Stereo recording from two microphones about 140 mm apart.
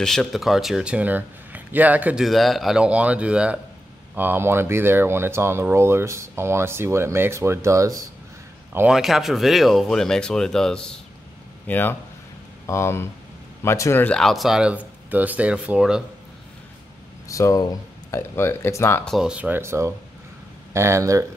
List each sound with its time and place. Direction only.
0.0 s speech: 5° left (ahead or behind)
2.2 s speech: centre (ahead or behind); by 8.0 s 20° right (ahead or behind)
8.7 s speech: 5° right (ahead or behind)
17.3 s speech: 25° left (ahead or behind)
19.0 s speech: 5° right (ahead or behind); by 21.3 s 20° right (ahead or behind)